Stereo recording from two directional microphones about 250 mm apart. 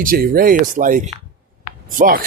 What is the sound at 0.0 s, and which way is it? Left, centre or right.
Speech, right.